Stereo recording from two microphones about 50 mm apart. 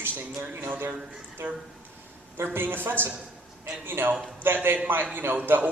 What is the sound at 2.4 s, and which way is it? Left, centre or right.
A woman's voice, right.